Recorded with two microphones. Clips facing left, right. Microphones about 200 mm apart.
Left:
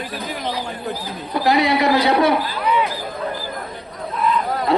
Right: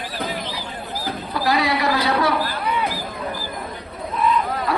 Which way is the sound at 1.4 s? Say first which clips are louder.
Left 4 dB; 20° left (ahead or behind).